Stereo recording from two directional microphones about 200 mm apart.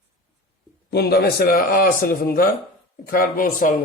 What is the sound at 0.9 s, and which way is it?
A man's voice, 55° left (ahead or behind).